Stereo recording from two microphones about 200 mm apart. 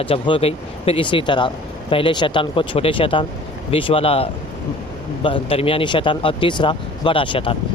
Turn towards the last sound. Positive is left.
turn(degrees=25)  # may be behind; listen again after turning